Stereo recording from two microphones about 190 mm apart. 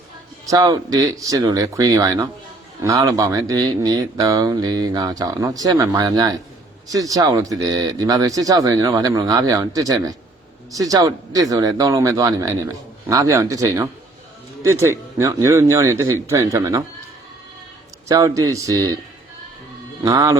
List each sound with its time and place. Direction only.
0.4 s speech: 20° right (ahead or behind)
18.1 s speech: 20° right (ahead or behind)
20.1 s speech: 20° right (ahead or behind)